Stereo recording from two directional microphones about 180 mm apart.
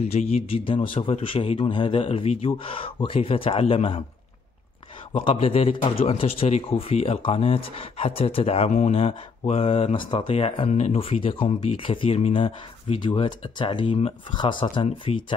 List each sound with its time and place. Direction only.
0.0 s a man's voice: 35° left (ahead or behind)
5.1 s a man's voice: 30° left (ahead or behind)